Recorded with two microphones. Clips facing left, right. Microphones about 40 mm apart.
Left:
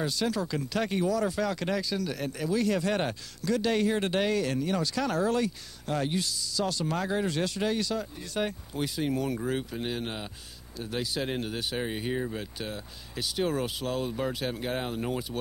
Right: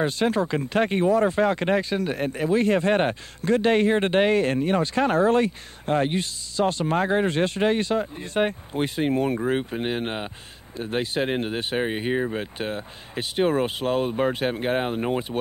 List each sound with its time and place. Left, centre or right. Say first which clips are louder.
0.0 s speech: right 7 dB; right